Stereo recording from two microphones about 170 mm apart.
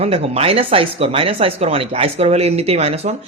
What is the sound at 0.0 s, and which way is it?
Speech, 35° right (ahead or behind).